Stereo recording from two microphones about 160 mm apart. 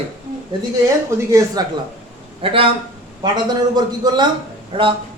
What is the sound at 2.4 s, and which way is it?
A man's voice, 35° right (ahead or behind).